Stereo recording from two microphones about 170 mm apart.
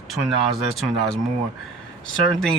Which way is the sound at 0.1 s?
Centre (ahead or behind).